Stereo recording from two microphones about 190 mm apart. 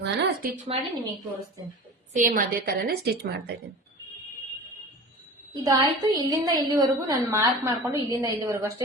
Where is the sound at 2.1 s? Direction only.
45° right (ahead or behind).